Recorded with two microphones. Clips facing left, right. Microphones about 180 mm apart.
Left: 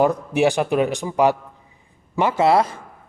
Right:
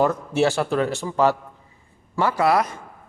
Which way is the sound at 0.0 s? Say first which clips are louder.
Left 2 dB; 15° left (ahead or behind).